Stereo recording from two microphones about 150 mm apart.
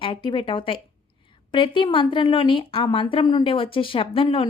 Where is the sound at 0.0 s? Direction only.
35° left (ahead or behind).